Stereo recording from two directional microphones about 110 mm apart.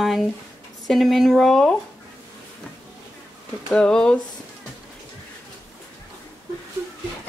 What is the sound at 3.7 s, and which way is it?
Speech, 5° left (ahead or behind).